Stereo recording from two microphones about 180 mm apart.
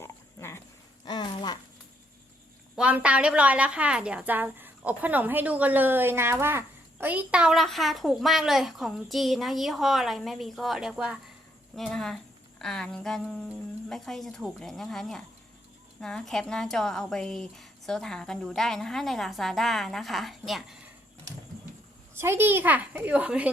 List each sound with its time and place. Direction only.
0.0 s pig: 15° left (ahead or behind)
1.0 s a sound: 25° left (ahead or behind)
2.7 s a woman's voice: 5° right (ahead or behind)
22.1 s a woman's voice: 15° right (ahead or behind)